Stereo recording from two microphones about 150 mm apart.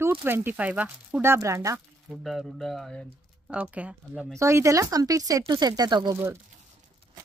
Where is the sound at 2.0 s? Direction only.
Centre (ahead or behind).